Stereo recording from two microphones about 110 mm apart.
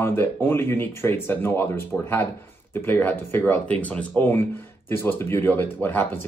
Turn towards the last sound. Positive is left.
turn(degrees=20)  # may be behind; listen again after turning